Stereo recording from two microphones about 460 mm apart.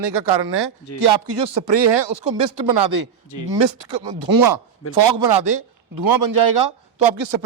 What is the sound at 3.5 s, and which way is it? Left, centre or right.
Speech, right.